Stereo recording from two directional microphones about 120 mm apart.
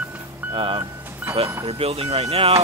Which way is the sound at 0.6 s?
45° right (ahead or behind).